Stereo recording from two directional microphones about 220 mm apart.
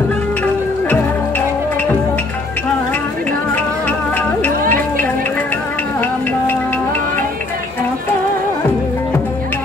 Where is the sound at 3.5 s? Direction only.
10° left (ahead or behind).